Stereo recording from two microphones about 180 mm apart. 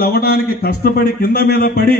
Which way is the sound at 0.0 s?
60° left (ahead or behind).